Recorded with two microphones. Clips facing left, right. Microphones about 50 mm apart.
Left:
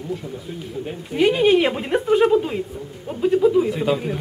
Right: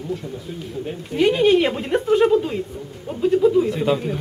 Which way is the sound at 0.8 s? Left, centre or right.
Centre.